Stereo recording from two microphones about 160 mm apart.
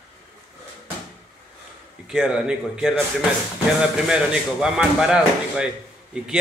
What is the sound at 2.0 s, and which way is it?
Speech, 5° right (ahead or behind).